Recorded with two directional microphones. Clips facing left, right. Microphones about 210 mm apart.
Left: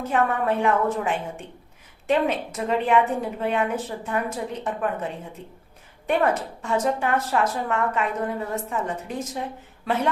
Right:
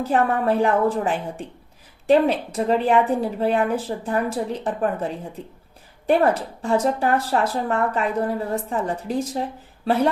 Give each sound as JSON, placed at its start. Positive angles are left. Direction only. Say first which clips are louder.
{"t": 0.0, "sound": "speech", "louder": "right 3 dB", "side_deg": -35}